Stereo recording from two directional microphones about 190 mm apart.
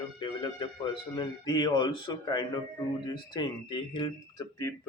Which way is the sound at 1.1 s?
20° left (ahead or behind).